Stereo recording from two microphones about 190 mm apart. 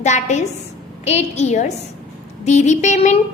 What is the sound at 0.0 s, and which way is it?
A woman's voice, 40° left (ahead or behind).